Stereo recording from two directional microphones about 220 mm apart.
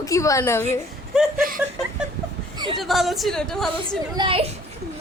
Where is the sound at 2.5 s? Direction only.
20° right (ahead or behind).